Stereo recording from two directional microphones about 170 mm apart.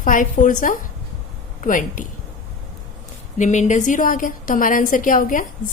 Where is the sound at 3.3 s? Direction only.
45° left (ahead or behind).